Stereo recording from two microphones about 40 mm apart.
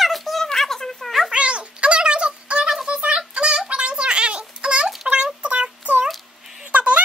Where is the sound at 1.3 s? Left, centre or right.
Right.